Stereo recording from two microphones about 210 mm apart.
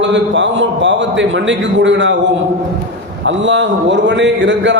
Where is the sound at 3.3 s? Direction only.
60° right (ahead or behind).